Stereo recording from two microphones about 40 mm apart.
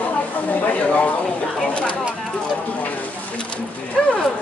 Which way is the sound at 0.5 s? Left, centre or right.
Left.